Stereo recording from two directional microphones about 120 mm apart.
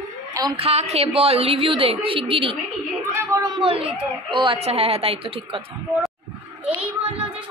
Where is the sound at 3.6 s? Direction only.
50° right (ahead or behind).